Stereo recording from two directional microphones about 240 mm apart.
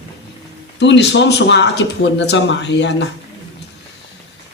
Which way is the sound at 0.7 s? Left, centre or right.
Left.